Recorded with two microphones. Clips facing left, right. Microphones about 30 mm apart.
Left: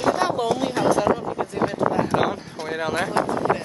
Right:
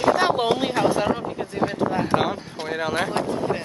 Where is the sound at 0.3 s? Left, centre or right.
Right.